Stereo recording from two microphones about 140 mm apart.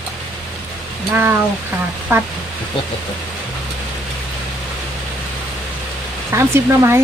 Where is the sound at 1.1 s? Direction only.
15° right (ahead or behind).